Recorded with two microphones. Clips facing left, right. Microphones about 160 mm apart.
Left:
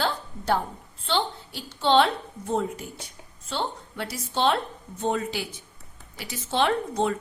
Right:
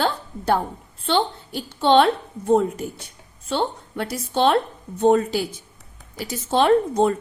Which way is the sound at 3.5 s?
50° right (ahead or behind).